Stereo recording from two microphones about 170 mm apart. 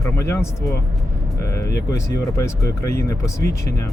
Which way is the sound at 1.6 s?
75° left (ahead or behind).